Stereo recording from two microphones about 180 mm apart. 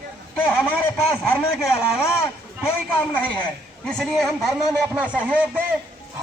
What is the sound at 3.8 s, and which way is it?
A man's voice, centre (ahead or behind).